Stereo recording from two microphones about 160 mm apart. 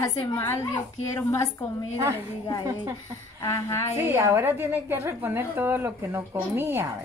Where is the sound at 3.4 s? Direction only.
20° left (ahead or behind).